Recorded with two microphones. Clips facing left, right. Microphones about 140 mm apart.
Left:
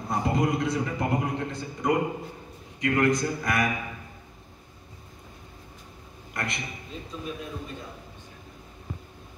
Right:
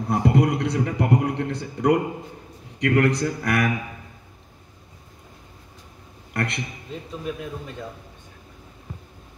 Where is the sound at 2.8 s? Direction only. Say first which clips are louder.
Right 3 dB; 65° right (ahead or behind).